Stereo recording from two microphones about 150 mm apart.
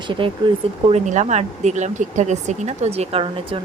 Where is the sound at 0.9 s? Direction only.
50° right (ahead or behind).